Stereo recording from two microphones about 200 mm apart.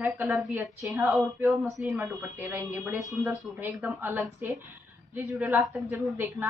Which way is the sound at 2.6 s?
Centre (ahead or behind).